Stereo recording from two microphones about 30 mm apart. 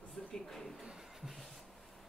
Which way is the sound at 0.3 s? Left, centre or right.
Centre.